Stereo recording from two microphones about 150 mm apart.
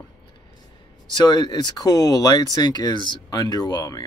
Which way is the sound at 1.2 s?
30° left (ahead or behind).